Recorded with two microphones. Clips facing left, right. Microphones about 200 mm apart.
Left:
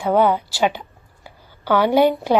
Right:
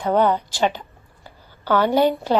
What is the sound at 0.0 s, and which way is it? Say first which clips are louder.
A woman's voice: left 2 dB; 10° left (ahead or behind).